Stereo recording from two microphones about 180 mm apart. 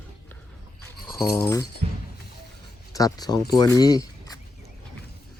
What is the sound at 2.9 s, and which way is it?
Speech, 20° left (ahead or behind).